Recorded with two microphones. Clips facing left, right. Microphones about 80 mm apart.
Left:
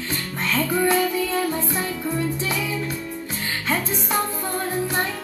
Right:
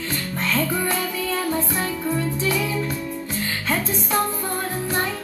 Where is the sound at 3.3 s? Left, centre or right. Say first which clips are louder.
Even; left.